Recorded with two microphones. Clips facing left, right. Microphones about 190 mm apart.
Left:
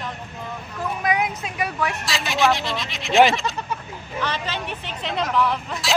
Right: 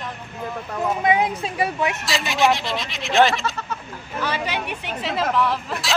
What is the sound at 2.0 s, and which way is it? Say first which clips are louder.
Speech: even; centre (ahead or behind).